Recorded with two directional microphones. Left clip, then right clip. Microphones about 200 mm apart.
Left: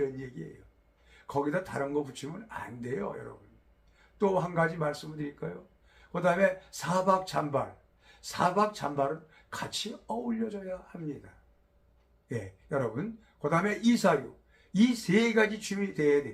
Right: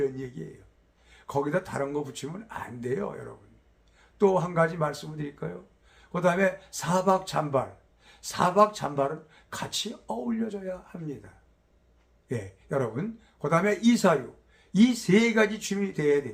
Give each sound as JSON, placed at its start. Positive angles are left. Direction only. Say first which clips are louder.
{"t": 0.4, "sound": "speech", "louder": "right 3 dB", "side_deg": -20}
{"t": 12.3, "sound": "speech", "louder": "right 3 dB", "side_deg": -20}